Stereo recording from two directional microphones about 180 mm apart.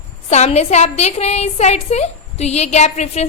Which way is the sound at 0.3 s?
40° left (ahead or behind).